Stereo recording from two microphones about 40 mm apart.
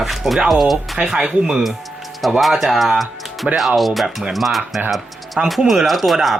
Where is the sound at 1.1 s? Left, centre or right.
Centre.